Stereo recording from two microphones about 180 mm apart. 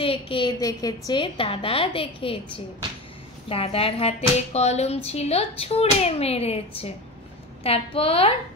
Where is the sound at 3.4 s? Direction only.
30° left (ahead or behind).